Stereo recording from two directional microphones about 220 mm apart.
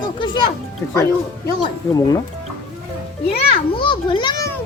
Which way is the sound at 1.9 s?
20° left (ahead or behind).